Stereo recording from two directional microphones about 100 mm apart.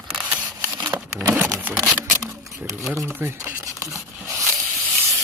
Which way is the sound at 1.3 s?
15° right (ahead or behind).